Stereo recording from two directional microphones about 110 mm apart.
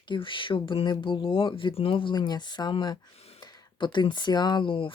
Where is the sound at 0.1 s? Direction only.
50° left (ahead or behind).